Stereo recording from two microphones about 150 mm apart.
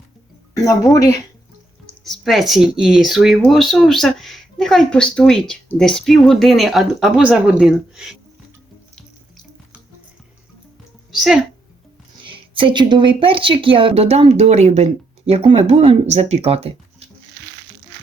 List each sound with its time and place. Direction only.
0.5 s speech: 20° left (ahead or behind)
2.0 s speech: centre (ahead or behind)
12.2 s speech: 35° right (ahead or behind)